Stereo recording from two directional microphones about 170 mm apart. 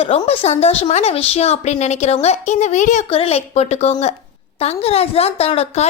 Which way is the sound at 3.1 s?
35° left (ahead or behind).